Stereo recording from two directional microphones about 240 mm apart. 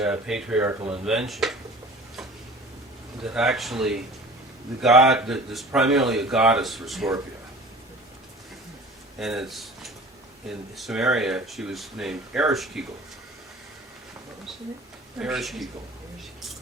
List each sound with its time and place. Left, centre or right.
0.0 s speech: centre
3.2 s speech: centre
9.1 s speech: centre
15.2 s speech: centre